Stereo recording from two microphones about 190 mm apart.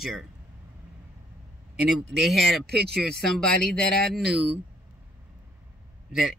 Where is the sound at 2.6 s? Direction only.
55° right (ahead or behind).